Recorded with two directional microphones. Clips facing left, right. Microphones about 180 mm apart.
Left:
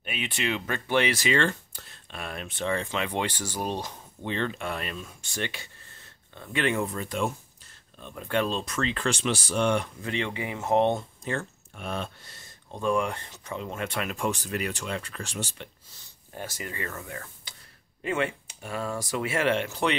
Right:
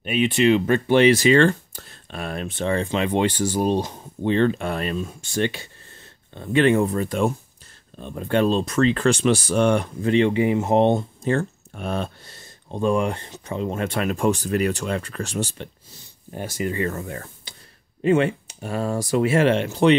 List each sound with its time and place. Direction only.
0.0 s speech: 25° right (ahead or behind); by 12.1 s 40° right (ahead or behind)
12.7 s speech: 25° right (ahead or behind)
16.3 s speech: 20° right (ahead or behind)